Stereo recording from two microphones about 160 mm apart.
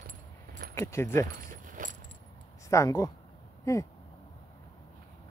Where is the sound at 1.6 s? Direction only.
55° right (ahead or behind).